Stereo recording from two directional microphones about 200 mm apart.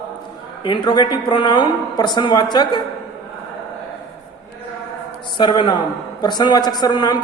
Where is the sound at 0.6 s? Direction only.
25° left (ahead or behind).